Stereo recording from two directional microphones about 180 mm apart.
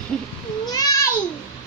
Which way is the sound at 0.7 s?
20° left (ahead or behind).